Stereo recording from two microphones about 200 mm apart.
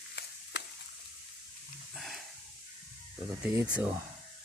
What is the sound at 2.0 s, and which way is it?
Dog, centre (ahead or behind).